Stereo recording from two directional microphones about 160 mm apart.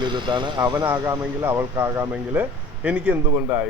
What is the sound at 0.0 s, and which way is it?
Speech, 30° right (ahead or behind).